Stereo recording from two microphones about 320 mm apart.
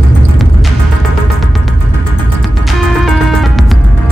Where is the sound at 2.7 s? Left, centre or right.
Centre.